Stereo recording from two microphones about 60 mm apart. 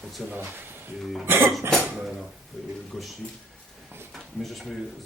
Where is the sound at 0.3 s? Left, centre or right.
Right.